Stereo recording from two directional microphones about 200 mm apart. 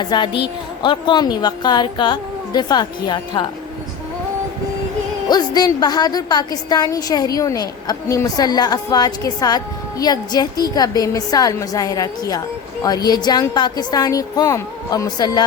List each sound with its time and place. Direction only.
0.0 s a woman's voice: 20° left (ahead or behind)
5.3 s a woman's voice: 20° left (ahead or behind)